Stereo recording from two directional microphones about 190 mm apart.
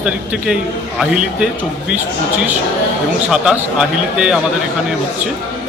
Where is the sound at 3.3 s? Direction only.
5° right (ahead or behind).